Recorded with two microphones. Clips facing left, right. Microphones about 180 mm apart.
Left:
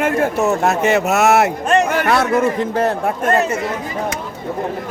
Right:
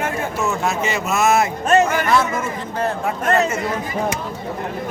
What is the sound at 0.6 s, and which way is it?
A man's voice, 65° left (ahead or behind).